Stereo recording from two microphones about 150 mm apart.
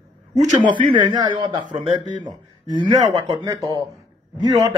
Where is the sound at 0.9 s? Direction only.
30° right (ahead or behind).